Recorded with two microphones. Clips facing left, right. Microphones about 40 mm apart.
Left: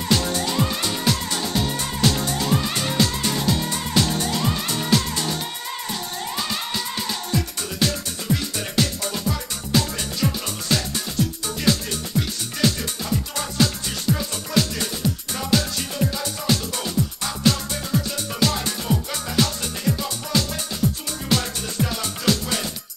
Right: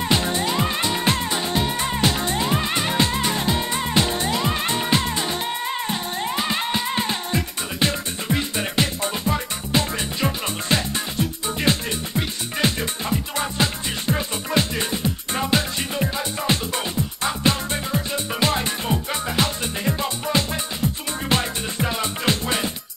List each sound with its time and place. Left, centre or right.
0.1 s music: right